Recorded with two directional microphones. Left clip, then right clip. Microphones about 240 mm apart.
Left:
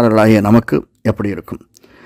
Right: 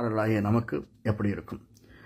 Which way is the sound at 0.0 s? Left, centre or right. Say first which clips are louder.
Left 17 dB; left.